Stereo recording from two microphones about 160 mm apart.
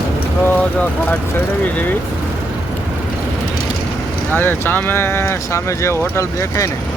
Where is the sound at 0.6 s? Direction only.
10° left (ahead or behind).